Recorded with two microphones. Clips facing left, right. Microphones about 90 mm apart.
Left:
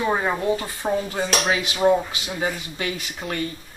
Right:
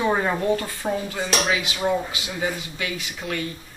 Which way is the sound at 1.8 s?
15° left (ahead or behind).